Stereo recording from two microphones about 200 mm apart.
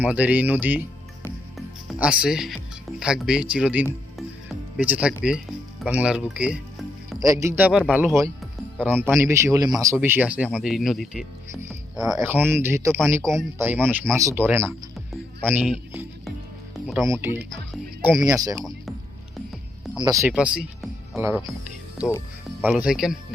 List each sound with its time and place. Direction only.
0.0 s speech: 5° right (ahead or behind)
1.5 s music: 5° right (ahead or behind)
3.0 s speech: 5° right (ahead or behind)
7.2 s speech: 15° right (ahead or behind)
8.5 s music: centre (ahead or behind)
9.1 s speech: 15° right (ahead or behind)
14.7 s music: 5° left (ahead or behind)
15.4 s speech: 5° right (ahead or behind)
16.7 s music: centre (ahead or behind)
17.0 s speech: 15° right (ahead or behind)
20.0 s speech: 15° right (ahead or behind)
20.3 s speech: 5° right (ahead or behind)
22.6 s speech: 5° right (ahead or behind)